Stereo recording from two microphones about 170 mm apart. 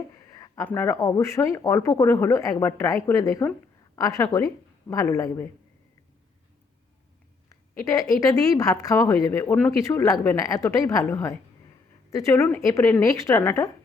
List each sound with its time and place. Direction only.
0.3 s speech: 20° left (ahead or behind)
7.9 s speech: 20° left (ahead or behind)